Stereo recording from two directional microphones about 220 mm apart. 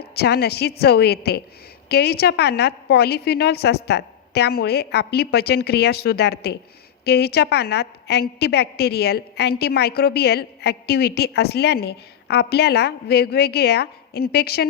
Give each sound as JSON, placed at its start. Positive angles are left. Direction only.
{"t": 0.2, "sound": "a woman's voice", "side_deg": 45}